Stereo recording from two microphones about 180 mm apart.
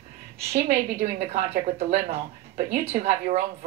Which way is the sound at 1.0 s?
40° right (ahead or behind).